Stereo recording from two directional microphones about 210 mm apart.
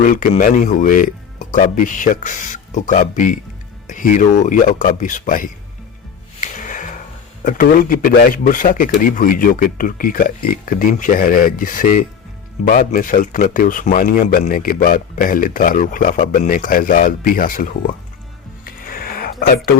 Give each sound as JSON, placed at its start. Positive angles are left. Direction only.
{"t": 0.0, "sound": "speech", "side_deg": 40}
{"t": 6.4, "sound": "music", "side_deg": 40}
{"t": 7.4, "sound": "speech", "side_deg": 40}
{"t": 18.6, "sound": "a sound", "side_deg": 45}